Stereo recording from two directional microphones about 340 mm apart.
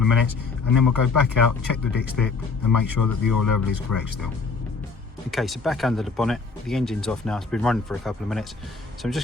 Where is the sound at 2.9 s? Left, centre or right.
Left.